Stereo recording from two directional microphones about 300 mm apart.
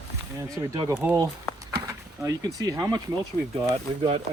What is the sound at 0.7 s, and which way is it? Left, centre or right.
Speech, centre.